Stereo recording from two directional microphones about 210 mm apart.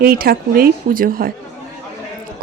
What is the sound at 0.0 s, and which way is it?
Speech, 45° right (ahead or behind).